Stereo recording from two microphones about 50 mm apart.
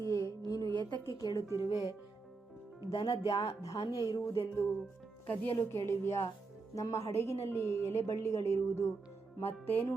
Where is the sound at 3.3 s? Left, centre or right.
Left.